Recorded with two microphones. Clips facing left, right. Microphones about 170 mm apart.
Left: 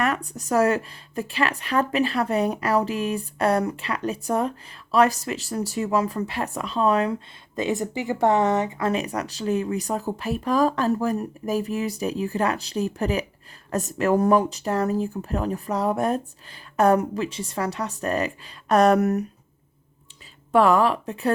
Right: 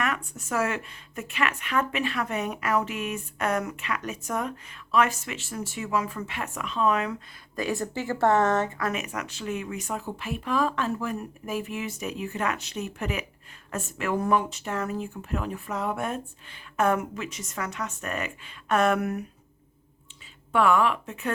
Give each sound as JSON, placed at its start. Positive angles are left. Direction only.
{"t": 0.0, "sound": "speech", "side_deg": 35}
{"t": 7.5, "sound": "speech", "side_deg": 20}
{"t": 8.8, "sound": "speech", "side_deg": 30}
{"t": 20.5, "sound": "speech", "side_deg": 35}